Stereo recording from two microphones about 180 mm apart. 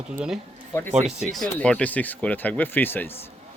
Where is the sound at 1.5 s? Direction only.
5° left (ahead or behind).